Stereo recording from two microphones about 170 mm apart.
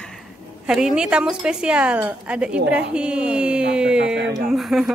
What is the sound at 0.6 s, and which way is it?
A woman's voice, 5° right (ahead or behind).